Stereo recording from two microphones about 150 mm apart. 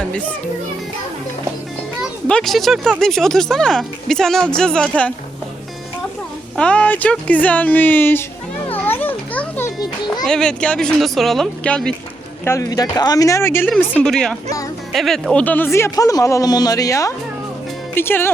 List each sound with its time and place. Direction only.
2.0 s speech: 5° left (ahead or behind)
6.6 s speech: 10° left (ahead or behind)
8.7 s children playing: 10° left (ahead or behind)
10.2 s speech: 5° left (ahead or behind)
12.5 s speech: 20° left (ahead or behind)